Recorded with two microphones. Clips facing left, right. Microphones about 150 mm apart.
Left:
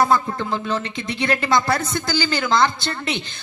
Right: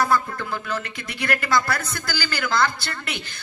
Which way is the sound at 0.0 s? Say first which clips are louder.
Left 3 dB; 25° left (ahead or behind).